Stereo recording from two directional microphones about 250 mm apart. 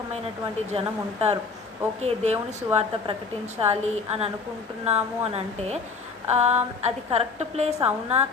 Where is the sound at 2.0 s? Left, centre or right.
Right.